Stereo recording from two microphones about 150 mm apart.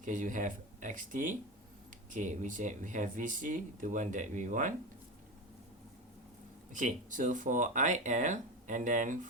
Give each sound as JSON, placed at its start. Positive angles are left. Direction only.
{"t": 0.0, "sound": "speech", "side_deg": -60}
{"t": 6.7, "sound": "speech", "side_deg": -60}